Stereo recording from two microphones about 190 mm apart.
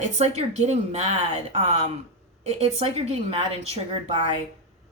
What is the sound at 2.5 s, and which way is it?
Speech, 35° right (ahead or behind).